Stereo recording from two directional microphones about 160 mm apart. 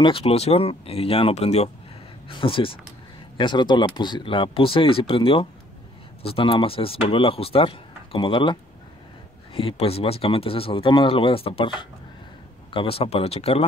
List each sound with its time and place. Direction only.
0.0 s speech: 35° left (ahead or behind)